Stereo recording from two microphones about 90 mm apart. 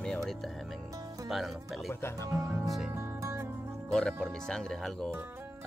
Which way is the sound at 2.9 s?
30° right (ahead or behind).